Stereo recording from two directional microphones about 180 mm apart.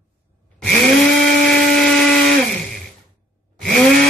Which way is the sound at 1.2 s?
5° left (ahead or behind).